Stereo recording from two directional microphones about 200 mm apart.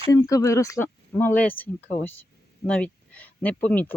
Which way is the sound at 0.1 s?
15° left (ahead or behind).